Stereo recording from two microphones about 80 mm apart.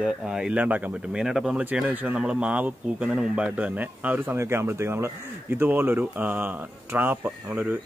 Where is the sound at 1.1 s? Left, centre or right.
Centre.